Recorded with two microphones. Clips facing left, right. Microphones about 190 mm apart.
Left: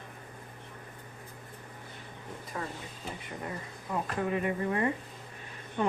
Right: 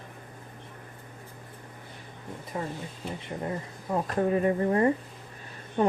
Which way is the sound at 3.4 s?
35° right (ahead or behind).